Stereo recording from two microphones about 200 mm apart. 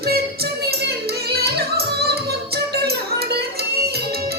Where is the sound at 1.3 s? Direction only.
55° right (ahead or behind).